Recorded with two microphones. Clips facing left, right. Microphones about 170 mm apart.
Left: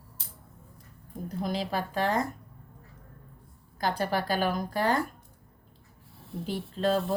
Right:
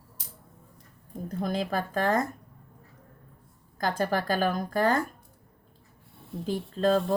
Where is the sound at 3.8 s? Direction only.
45° right (ahead or behind).